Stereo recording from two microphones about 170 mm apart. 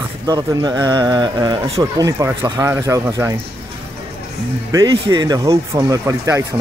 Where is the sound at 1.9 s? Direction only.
20° right (ahead or behind).